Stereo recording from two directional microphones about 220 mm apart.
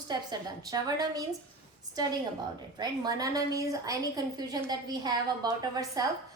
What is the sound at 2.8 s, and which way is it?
A woman's voice, 15° right (ahead or behind).